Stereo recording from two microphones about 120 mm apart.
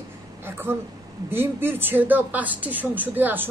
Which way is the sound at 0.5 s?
20° right (ahead or behind).